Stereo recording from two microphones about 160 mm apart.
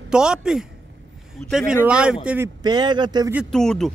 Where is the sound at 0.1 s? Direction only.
5° right (ahead or behind).